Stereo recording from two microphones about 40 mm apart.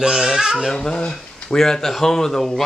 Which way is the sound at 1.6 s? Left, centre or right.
Centre.